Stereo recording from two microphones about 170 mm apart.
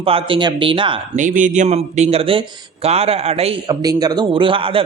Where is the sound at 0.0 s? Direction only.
35° right (ahead or behind).